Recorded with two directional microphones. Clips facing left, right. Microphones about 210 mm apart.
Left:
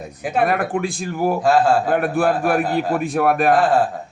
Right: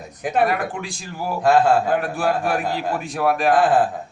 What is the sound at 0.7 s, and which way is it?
Speech, 55° left (ahead or behind).